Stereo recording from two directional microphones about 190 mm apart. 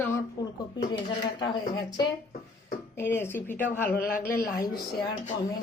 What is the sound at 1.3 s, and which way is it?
Speech, 25° left (ahead or behind).